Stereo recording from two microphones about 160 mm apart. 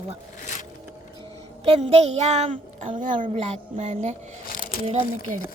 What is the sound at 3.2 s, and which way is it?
Music, 45° right (ahead or behind).